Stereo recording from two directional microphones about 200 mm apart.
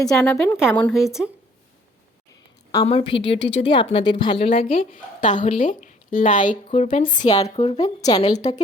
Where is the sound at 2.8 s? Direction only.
25° left (ahead or behind).